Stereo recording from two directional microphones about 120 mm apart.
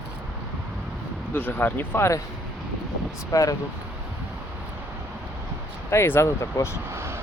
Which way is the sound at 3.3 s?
25° left (ahead or behind).